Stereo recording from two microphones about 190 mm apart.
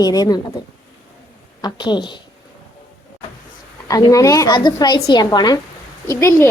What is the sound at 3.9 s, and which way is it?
A woman's voice, 20° left (ahead or behind).